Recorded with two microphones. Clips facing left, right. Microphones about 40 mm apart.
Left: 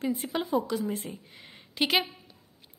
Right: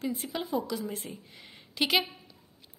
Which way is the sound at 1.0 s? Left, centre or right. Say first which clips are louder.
Left 2 dB; centre.